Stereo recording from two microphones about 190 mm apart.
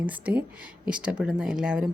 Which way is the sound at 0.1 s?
10° right (ahead or behind).